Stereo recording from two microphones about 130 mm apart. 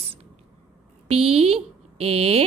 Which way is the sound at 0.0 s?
50° right (ahead or behind).